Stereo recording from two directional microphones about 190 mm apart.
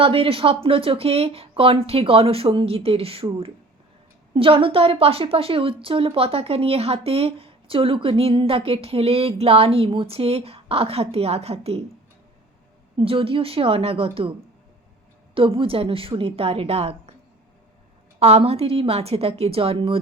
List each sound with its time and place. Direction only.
0.0 s a woman's voice: 30° right (ahead or behind)
13.0 s speech: 30° right (ahead or behind)
15.4 s speech: 30° right (ahead or behind)
18.2 s a woman's voice: 35° right (ahead or behind)